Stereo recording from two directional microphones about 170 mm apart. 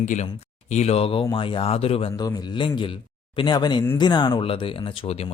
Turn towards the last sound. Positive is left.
turn(degrees=35)  # may be behind; listen again after turning